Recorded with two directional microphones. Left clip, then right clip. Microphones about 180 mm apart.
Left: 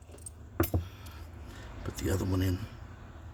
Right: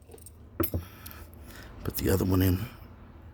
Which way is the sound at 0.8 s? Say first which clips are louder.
Right 2 dB; 40° right (ahead or behind).